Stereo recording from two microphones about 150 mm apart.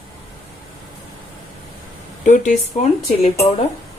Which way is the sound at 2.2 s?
55° left (ahead or behind).